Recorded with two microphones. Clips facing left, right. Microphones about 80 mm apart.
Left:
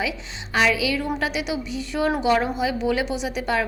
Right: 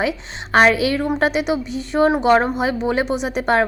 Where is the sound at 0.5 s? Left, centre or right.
Right.